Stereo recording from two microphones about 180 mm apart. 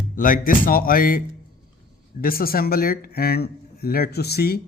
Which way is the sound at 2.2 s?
55° left (ahead or behind).